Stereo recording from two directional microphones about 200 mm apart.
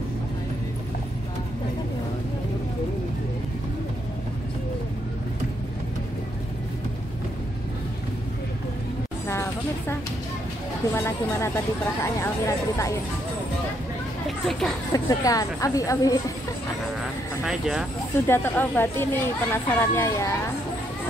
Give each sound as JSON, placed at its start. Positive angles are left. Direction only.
{"t": 9.3, "sound": "a sound", "side_deg": 15}
{"t": 10.9, "sound": "speech", "side_deg": 10}
{"t": 14.2, "sound": "children playing", "side_deg": 0}
{"t": 14.9, "sound": "speech", "side_deg": 20}
{"t": 17.5, "sound": "speech", "side_deg": 0}
{"t": 18.2, "sound": "speech", "side_deg": 10}